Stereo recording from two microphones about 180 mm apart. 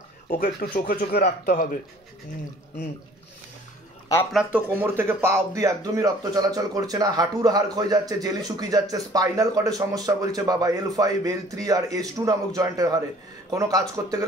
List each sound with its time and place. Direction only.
0.4 s speech: 55° left (ahead or behind)
4.3 s speech: 5° right (ahead or behind)